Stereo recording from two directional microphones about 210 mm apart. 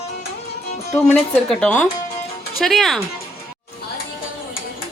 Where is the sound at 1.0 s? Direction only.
5° left (ahead or behind).